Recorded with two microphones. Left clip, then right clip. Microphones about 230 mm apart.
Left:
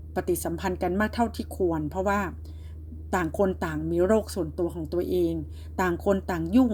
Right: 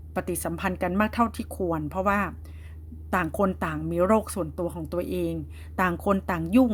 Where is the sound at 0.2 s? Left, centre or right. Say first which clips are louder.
Left 1 dB; right.